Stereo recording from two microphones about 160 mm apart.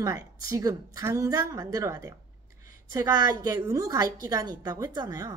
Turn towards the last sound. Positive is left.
turn(degrees=-25)  # may be behind; listen again after turning